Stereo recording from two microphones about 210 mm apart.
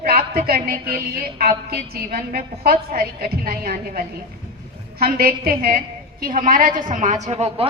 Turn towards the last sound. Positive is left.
turn(degrees=-30)  # may be behind; listen again after turning